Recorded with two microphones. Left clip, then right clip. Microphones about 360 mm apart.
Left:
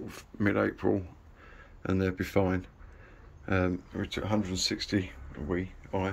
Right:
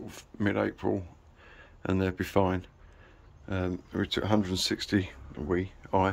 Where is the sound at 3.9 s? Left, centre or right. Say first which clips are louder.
Right 4 dB; centre.